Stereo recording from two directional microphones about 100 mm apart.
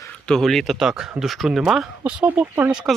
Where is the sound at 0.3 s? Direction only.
5° left (ahead or behind).